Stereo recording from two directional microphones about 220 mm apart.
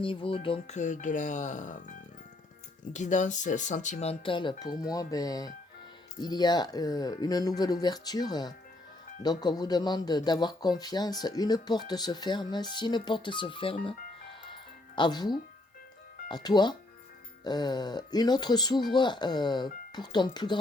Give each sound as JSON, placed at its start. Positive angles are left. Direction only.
{"t": 0.0, "sound": "speech", "side_deg": 25}
{"t": 2.9, "sound": "a man's voice", "side_deg": 35}